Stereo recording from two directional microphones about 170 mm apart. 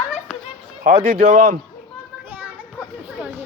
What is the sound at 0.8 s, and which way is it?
Speech, 55° right (ahead or behind).